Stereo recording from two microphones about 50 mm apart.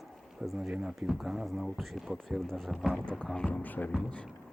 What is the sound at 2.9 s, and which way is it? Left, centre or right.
Speech, centre.